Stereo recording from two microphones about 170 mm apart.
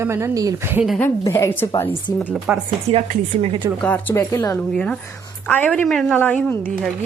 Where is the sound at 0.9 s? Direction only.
5° left (ahead or behind).